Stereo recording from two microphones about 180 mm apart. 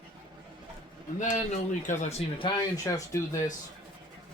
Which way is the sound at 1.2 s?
45° left (ahead or behind).